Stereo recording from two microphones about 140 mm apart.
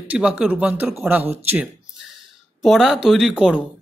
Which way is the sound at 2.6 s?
Centre (ahead or behind).